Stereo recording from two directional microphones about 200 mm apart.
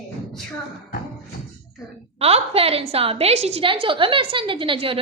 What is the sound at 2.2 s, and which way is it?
A woman's voice, 30° right (ahead or behind).